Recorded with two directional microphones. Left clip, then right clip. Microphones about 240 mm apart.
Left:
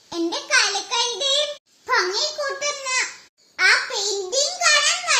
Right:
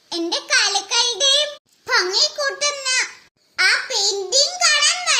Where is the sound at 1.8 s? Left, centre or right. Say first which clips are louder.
Right 3 dB; right.